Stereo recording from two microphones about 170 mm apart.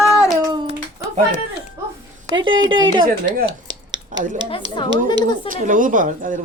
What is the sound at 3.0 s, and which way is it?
Speech, 75° right (ahead or behind).